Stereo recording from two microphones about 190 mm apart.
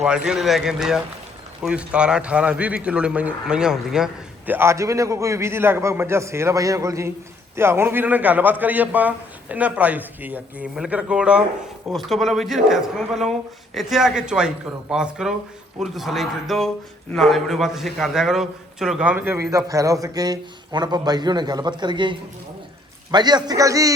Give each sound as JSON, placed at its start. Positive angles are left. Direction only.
{"t": 0.0, "sound": "a man's voice", "side_deg": -5}